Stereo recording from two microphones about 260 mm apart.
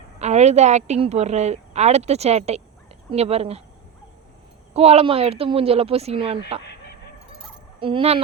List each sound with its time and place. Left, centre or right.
0.2 s a woman's voice: right
4.7 s a woman's voice: right
7.8 s a woman's voice: centre